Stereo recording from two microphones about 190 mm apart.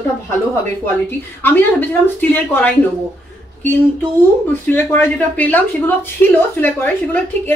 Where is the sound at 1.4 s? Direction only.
10° left (ahead or behind).